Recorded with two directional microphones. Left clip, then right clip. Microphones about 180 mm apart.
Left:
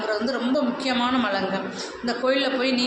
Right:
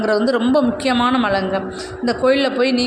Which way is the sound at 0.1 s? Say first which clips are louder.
Right 9 dB; 55° right (ahead or behind).